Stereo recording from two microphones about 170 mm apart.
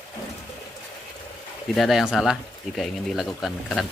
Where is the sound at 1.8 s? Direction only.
Centre (ahead or behind).